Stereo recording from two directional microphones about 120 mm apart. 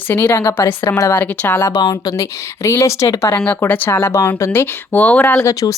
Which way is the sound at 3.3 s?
15° left (ahead or behind).